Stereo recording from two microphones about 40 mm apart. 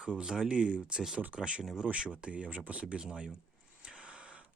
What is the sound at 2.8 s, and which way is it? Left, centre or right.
Speech, right.